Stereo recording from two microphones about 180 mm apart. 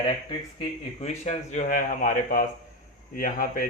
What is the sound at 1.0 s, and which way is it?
Speech, 40° left (ahead or behind).